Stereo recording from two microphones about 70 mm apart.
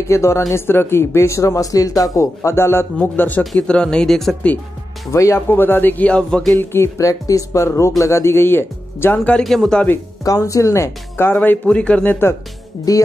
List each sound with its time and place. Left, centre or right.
0.1 s speech: left
2.4 s speech: left
3.2 s speech: left
3.5 s speech: centre
5.1 s speech: left
5.5 s speech: left
6.5 s speech: left
7.0 s speech: left
9.4 s speech: centre
10.2 s speech: left
11.2 s speech: left
12.9 s speech: left